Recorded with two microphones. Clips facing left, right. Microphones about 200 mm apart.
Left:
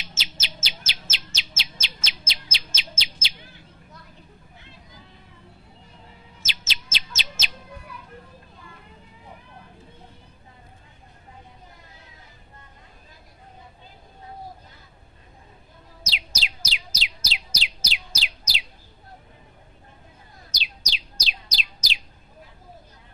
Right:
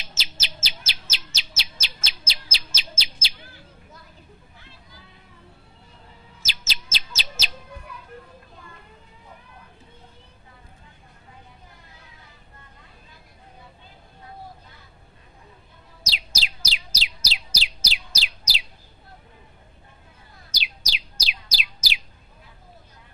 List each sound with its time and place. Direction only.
0.1 s chirp: 35° right (ahead or behind)
6.4 s chirp: 35° right (ahead or behind)
16.1 s bird: 35° right (ahead or behind)
20.5 s bird: 10° right (ahead or behind)